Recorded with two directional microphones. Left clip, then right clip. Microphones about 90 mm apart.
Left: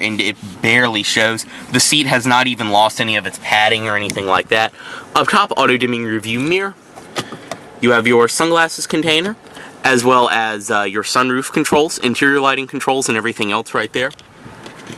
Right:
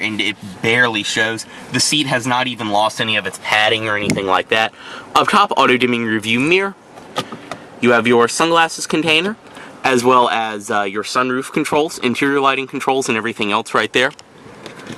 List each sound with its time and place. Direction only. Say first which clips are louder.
0.0 s speech: left 1 dB; 20° left (ahead or behind)
3.4 s speech: left 2 dB; 5° left (ahead or behind)
7.8 s speech: left 1 dB; 5° left (ahead or behind)
13.7 s speech: right 5 dB; 15° right (ahead or behind)